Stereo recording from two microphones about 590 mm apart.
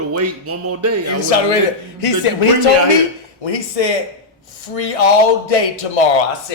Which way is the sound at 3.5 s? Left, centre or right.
Left.